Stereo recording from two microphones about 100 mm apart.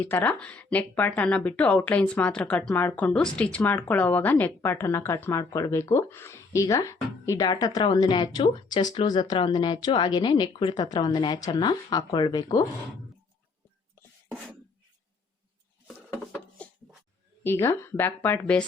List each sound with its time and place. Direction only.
0.0 s a woman's voice: 20° left (ahead or behind); by 12.6 s 45° left (ahead or behind)
16.6 s a sound: 15° left (ahead or behind)
17.4 s speech: 25° left (ahead or behind)